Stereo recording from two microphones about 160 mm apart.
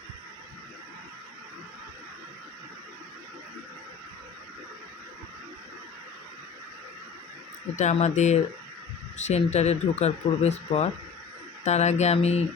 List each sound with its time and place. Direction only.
7.8 s speech: 45° left (ahead or behind)